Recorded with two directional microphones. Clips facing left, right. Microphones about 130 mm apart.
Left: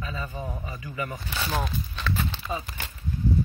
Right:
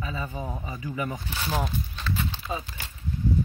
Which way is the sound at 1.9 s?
70° left (ahead or behind).